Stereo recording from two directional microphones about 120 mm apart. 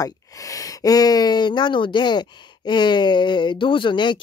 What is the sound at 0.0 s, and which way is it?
Speech, 30° left (ahead or behind).